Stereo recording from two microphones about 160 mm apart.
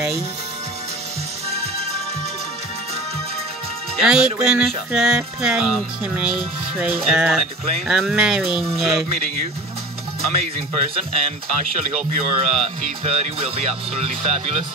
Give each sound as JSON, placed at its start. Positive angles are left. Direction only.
{"t": 4.0, "sound": "music", "side_deg": -5}
{"t": 10.7, "sound": "speech", "side_deg": -40}